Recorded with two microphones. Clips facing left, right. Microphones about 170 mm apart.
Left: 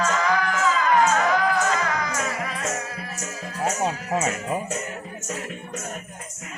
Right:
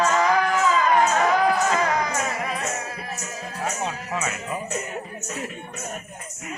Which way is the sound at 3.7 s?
40° left (ahead or behind).